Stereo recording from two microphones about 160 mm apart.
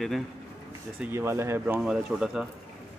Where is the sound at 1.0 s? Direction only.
15° right (ahead or behind).